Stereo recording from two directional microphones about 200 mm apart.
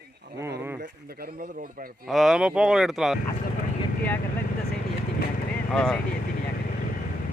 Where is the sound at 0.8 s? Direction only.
50° right (ahead or behind).